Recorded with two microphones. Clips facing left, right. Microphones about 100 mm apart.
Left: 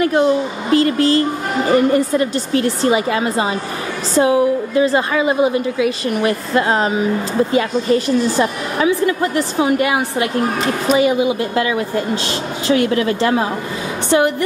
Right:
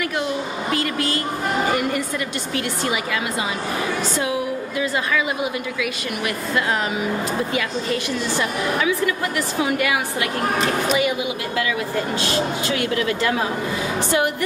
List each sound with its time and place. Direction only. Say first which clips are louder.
0.0 s a woman's voice: left 10 dB; 35° left (ahead or behind)